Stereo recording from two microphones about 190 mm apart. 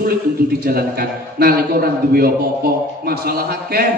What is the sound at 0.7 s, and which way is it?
A man's voice, 55° right (ahead or behind).